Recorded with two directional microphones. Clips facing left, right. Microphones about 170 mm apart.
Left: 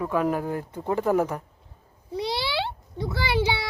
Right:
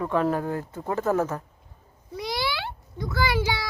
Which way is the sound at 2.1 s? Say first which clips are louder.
Left 2 dB; 30° left (ahead or behind).